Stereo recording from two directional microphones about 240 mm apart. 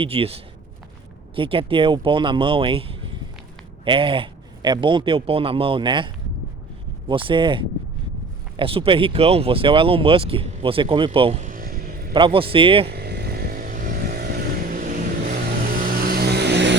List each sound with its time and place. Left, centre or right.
0.0 s a man's voice: right
7.1 s a man's voice: right
12.1 s a man's voice: right
12.9 s vehicle: right